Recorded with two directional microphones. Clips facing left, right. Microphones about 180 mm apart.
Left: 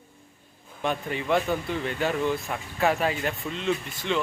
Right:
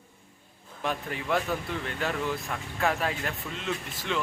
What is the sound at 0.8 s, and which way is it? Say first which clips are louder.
Speech: left 4 dB; centre (ahead or behind).